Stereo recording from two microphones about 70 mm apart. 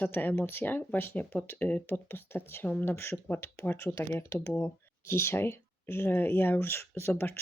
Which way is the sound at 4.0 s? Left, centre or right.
Left.